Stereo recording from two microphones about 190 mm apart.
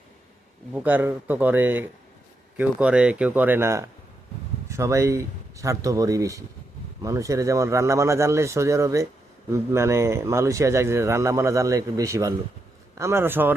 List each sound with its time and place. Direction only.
0.7 s speech: 10° right (ahead or behind)